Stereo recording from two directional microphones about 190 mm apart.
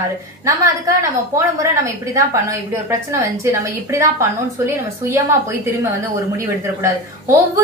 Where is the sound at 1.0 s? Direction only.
15° right (ahead or behind).